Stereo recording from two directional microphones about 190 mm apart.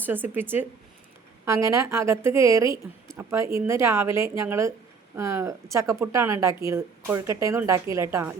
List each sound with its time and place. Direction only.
0.0 s a woman's voice: 10° right (ahead or behind)